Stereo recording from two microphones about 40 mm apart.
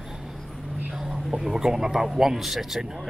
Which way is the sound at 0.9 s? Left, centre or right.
Centre.